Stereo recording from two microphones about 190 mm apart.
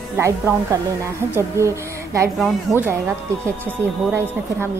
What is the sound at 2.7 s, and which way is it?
Speech, centre (ahead or behind).